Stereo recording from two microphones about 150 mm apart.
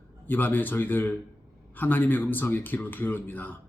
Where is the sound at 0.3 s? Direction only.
15° left (ahead or behind).